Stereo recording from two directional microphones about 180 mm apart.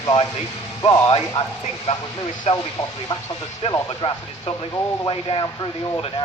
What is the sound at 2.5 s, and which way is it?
Speech, 35° left (ahead or behind).